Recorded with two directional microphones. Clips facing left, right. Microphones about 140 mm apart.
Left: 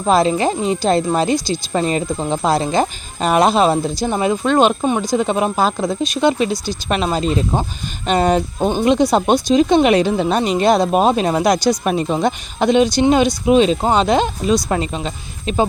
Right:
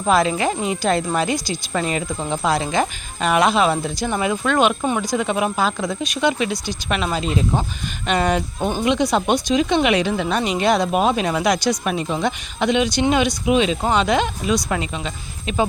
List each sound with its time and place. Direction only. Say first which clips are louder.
0.0 s speech: left 3 dB; 30° left (ahead or behind)